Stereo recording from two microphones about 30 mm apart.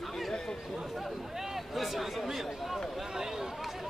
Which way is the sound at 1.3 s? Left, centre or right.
Centre.